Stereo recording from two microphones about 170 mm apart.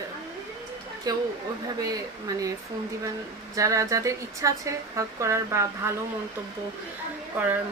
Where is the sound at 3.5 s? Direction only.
20° right (ahead or behind).